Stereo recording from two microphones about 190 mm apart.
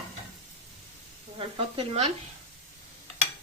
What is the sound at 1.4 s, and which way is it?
Speech, 30° right (ahead or behind).